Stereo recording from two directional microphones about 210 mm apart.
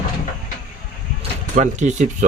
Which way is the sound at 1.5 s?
35° right (ahead or behind).